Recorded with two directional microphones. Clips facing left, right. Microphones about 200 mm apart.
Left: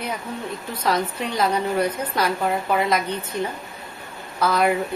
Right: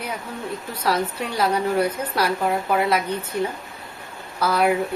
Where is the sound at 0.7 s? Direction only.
10° right (ahead or behind).